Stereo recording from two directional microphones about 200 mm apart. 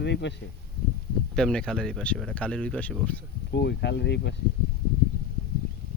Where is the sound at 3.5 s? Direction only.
55° left (ahead or behind).